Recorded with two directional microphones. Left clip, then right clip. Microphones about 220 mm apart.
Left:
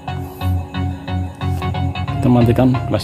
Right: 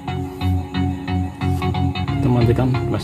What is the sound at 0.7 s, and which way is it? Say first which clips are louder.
Music: right 2 dB; 20° left (ahead or behind).